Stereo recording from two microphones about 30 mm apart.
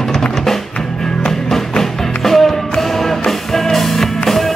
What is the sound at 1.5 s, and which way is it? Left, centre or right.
Music, centre.